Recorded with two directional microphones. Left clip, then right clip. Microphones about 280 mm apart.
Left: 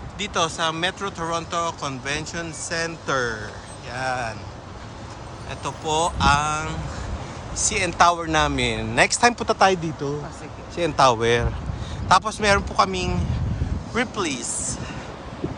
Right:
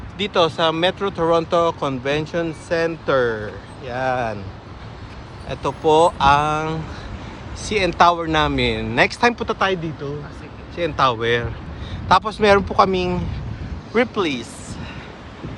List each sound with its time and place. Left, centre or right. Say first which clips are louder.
0.2 s speech: right 6 dB; centre
5.5 s speech: right 9 dB; centre